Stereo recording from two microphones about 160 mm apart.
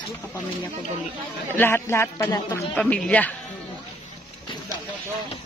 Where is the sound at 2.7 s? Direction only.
5° left (ahead or behind).